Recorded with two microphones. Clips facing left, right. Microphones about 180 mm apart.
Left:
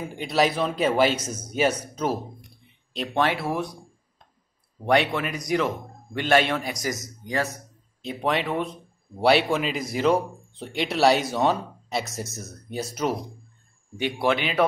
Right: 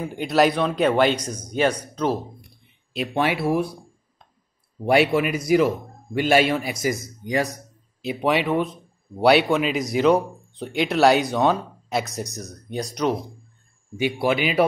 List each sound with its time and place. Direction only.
0.2 s speech: centre (ahead or behind)
2.9 s speech: 10° right (ahead or behind)
4.8 s speech: 10° right (ahead or behind)
8.0 s speech: 5° right (ahead or behind)
13.9 s speech: 5° right (ahead or behind)